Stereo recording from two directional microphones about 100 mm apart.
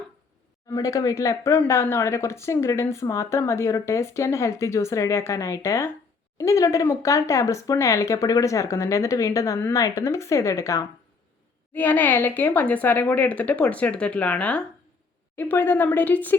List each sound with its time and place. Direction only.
0.7 s speech: 35° left (ahead or behind)
11.7 s a woman's voice: 20° left (ahead or behind)